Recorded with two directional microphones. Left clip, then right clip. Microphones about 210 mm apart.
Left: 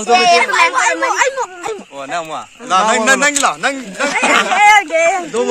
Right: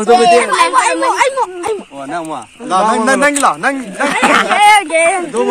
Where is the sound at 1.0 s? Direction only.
45° right (ahead or behind).